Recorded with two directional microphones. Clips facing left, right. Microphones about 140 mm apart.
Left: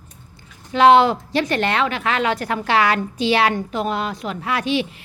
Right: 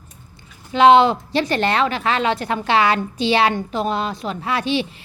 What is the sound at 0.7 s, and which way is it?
A woman's voice, 20° right (ahead or behind).